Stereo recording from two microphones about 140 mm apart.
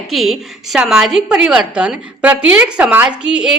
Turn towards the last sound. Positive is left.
turn(degrees=-5)  # may be behind; listen again after turning